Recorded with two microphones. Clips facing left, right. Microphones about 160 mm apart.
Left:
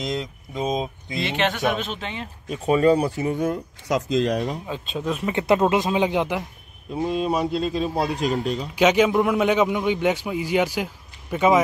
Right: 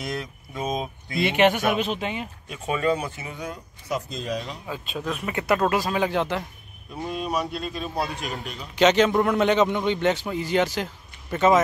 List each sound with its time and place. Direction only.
0.0 s speech: 20° left (ahead or behind)
1.2 s speech: 15° right (ahead or behind)
2.5 s speech: 35° left (ahead or behind)
3.9 s speech: 80° left
4.6 s speech: 20° left (ahead or behind)
7.0 s speech: 25° left (ahead or behind)
8.7 s a man's voice: 10° left (ahead or behind)